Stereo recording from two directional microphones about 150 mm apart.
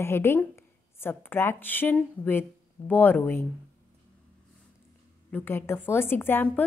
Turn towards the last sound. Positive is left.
turn(degrees=15)  # may be behind; listen again after turning